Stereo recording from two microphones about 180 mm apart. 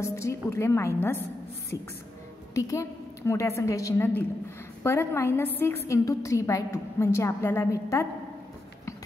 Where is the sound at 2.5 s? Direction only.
15° left (ahead or behind).